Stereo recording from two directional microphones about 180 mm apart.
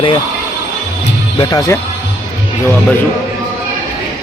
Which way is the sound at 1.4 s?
20° left (ahead or behind).